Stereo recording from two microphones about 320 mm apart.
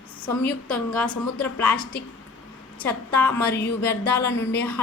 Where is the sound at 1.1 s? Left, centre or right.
Centre.